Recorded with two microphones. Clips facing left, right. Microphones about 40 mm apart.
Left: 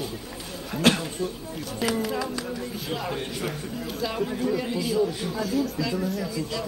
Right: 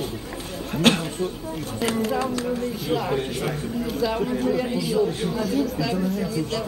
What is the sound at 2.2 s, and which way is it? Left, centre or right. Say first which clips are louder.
Speech: right 6 dB; right.